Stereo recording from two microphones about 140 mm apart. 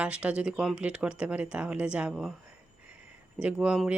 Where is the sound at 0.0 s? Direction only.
10° right (ahead or behind).